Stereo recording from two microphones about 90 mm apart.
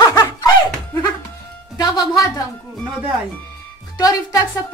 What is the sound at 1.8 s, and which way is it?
Music, 45° left (ahead or behind).